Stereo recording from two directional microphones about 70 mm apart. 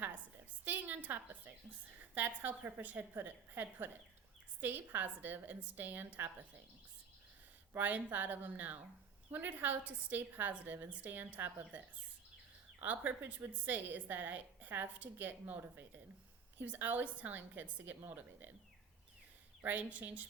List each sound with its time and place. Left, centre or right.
0.6 s a sound: right
2.1 s a woman's voice: right
7.7 s a woman's voice: right
12.8 s a woman's voice: right
19.6 s a woman's voice: right